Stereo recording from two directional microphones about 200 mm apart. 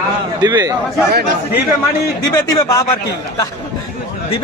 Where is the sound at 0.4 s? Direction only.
20° right (ahead or behind).